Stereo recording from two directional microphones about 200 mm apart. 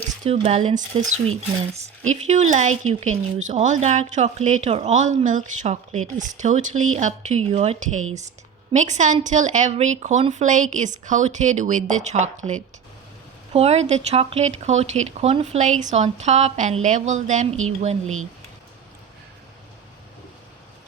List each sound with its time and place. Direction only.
0.3 s a woman's voice: 30° right (ahead or behind)
2.2 s a woman's voice: 35° right (ahead or behind)
13.5 s a woman's voice: 30° right (ahead or behind)